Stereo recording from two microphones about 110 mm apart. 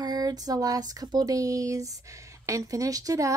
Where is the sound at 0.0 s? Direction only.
35° right (ahead or behind).